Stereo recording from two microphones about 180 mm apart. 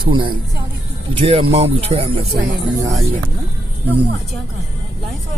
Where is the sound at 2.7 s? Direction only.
20° right (ahead or behind).